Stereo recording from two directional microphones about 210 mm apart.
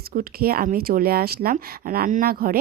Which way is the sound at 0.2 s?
45° right (ahead or behind).